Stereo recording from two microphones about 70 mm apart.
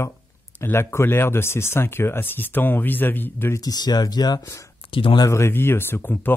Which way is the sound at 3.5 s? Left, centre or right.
Left.